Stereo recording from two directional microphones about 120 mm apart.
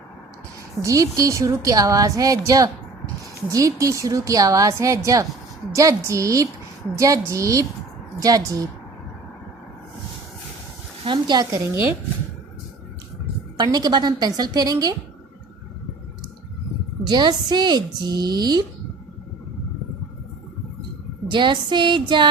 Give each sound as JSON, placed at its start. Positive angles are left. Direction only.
{"t": 0.8, "sound": "a woman's voice", "side_deg": -30}
{"t": 11.0, "sound": "a woman's voice", "side_deg": -40}
{"t": 13.6, "sound": "a woman's voice", "side_deg": -35}
{"t": 17.1, "sound": "a woman's voice", "side_deg": -35}
{"t": 21.2, "sound": "a woman's voice", "side_deg": -40}